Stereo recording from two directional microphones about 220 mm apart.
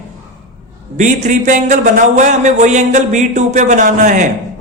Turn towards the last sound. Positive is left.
turn(degrees=-35)  # may be behind; listen again after turning